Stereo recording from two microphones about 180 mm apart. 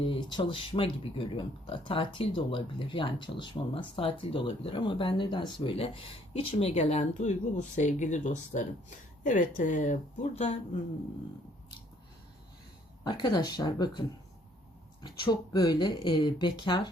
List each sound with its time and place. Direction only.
0.0 s speech: 25° left (ahead or behind)
13.1 s speech: 25° left (ahead or behind)
15.0 s speech: 25° left (ahead or behind)